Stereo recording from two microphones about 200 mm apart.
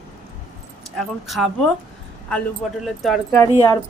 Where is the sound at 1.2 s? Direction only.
Centre (ahead or behind).